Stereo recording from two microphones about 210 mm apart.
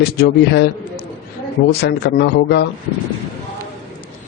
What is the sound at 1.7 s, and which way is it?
Speech, 50° left (ahead or behind).